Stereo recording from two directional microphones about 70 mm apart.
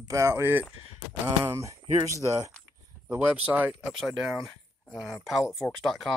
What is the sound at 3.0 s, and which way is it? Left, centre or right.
Speech, centre.